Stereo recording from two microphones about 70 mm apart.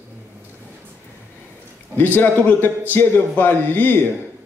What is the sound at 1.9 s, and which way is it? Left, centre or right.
A man's voice, left.